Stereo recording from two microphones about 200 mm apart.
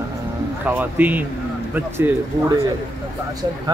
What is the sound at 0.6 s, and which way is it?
Speech, 10° right (ahead or behind).